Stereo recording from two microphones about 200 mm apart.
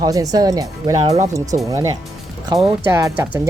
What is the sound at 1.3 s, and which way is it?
Speech, 15° right (ahead or behind).